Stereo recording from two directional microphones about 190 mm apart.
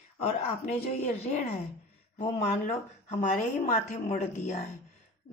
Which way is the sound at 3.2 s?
40° left (ahead or behind).